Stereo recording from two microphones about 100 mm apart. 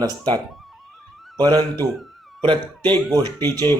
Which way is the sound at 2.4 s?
50° right (ahead or behind).